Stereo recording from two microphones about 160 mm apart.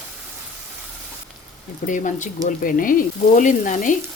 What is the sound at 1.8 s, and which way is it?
Sizzle, 55° left (ahead or behind).